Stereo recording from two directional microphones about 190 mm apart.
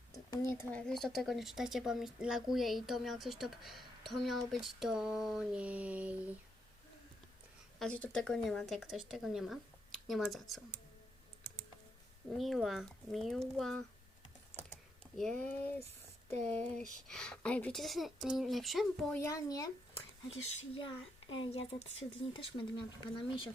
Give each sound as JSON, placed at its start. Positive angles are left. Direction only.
{"t": 0.1, "sound": "speech", "side_deg": 15}
{"t": 0.9, "sound": "speech", "side_deg": 0}
{"t": 7.8, "sound": "speech", "side_deg": 5}
{"t": 12.4, "sound": "speech", "side_deg": 0}
{"t": 15.1, "sound": "speech", "side_deg": 5}
{"t": 19.2, "sound": "speech", "side_deg": 20}
{"t": 20.7, "sound": "speech", "side_deg": 30}